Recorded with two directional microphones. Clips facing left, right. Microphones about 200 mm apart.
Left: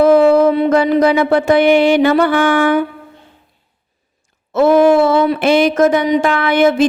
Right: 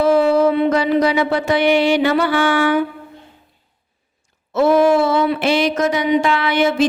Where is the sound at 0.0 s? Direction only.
55° left (ahead or behind).